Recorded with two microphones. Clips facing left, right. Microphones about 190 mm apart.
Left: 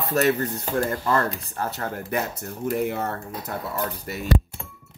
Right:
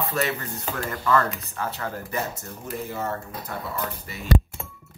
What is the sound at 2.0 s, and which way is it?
Speech, 65° left (ahead or behind).